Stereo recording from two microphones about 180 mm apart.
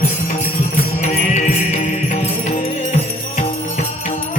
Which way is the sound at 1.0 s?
40° left (ahead or behind).